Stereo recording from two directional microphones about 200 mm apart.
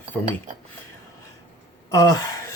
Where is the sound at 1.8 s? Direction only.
20° left (ahead or behind).